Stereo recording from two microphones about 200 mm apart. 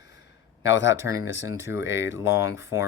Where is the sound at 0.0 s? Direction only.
60° left (ahead or behind).